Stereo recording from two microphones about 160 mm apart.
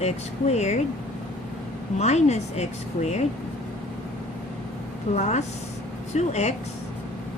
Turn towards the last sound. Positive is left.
turn(degrees=45)  # may be behind; listen again after turning